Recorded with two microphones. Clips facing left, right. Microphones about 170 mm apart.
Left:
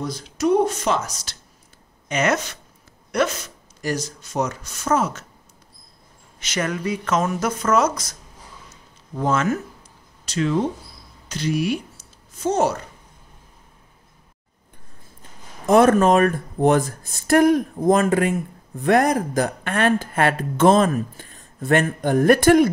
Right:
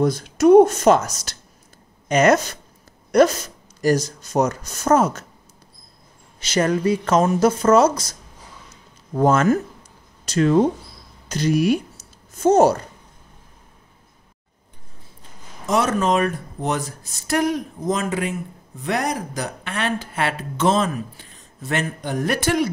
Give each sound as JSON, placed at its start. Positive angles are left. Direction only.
{"t": 0.0, "sound": "speech", "side_deg": -55}
{"t": 6.4, "sound": "speech", "side_deg": -35}
{"t": 9.1, "sound": "speech", "side_deg": -45}
{"t": 15.6, "sound": "speech", "side_deg": 55}